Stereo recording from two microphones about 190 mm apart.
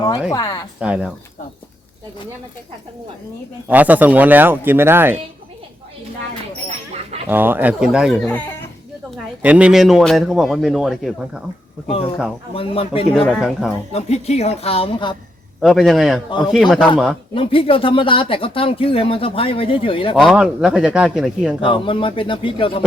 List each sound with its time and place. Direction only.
0.3 s speech: 20° left (ahead or behind)
0.8 s speech: 5° right (ahead or behind)
3.7 s speech: 10° right (ahead or behind)
7.3 s speech: 10° right (ahead or behind); by 8.5 s 5° left (ahead or behind)
9.0 s speech: 5° right (ahead or behind)
11.9 s speech: 30° left (ahead or behind)
13.2 s speech: centre (ahead or behind)
13.9 s a woman's voice: 35° left (ahead or behind)
15.6 s speech: centre (ahead or behind)
17.3 s speech: 30° left (ahead or behind)
20.1 s speech: centre (ahead or behind)
21.7 s speech: 25° left (ahead or behind)